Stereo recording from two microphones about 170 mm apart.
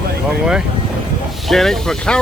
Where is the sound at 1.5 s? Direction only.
Centre (ahead or behind).